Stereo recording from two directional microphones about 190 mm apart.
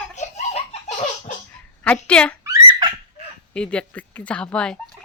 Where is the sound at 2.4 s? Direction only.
20° right (ahead or behind).